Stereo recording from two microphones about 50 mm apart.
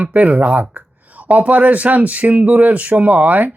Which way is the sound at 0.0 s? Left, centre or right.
Right.